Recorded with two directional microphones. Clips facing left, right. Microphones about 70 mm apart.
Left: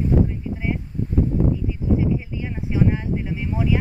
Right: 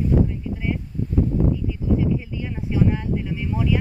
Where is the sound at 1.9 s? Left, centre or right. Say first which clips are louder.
Even; centre.